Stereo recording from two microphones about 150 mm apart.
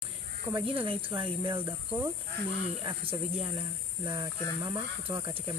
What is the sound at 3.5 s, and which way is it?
Speech, 25° right (ahead or behind).